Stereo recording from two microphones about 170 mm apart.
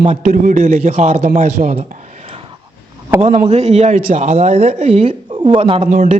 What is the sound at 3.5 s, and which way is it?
Speech, 40° right (ahead or behind).